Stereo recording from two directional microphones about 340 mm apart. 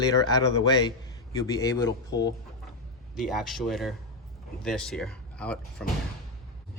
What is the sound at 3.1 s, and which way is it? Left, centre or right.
Speech, centre.